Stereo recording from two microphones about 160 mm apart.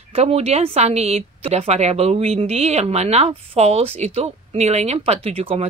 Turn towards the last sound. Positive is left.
turn(degrees=-40)  # may be behind; listen again after turning